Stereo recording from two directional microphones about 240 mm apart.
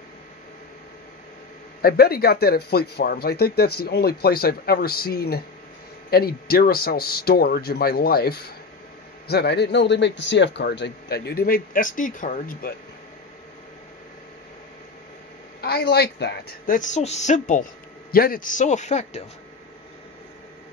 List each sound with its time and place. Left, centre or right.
1.8 s a man's voice: left
15.6 s speech: left